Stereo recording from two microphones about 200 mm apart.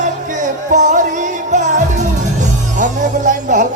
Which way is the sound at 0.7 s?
35° right (ahead or behind).